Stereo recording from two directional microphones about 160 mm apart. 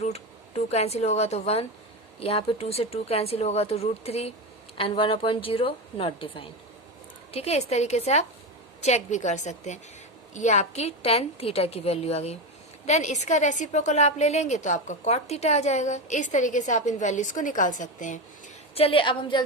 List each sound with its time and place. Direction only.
0.0 s a woman's voice: 40° left (ahead or behind)
18.7 s speech: 35° left (ahead or behind)